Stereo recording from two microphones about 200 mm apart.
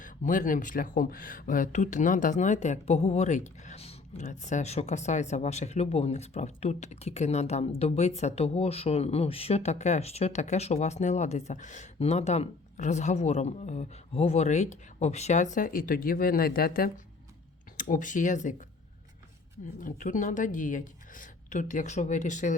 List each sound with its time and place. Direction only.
0.0 s speech: 40° left (ahead or behind)
19.8 s speech: 40° left (ahead or behind)